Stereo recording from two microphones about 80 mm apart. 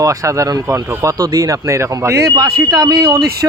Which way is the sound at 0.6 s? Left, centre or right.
Right.